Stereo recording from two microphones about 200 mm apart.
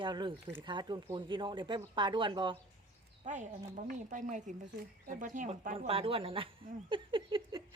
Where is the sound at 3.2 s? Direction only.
40° right (ahead or behind).